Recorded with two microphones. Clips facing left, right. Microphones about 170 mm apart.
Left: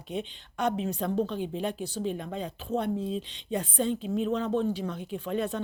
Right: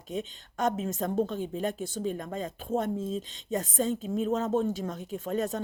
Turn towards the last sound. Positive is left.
turn(degrees=-40)  # may be behind; listen again after turning